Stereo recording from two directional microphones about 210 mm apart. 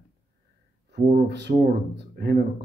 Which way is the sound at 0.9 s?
50° right (ahead or behind).